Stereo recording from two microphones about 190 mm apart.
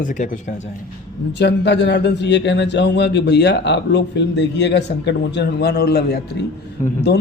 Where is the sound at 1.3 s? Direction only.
65° left (ahead or behind).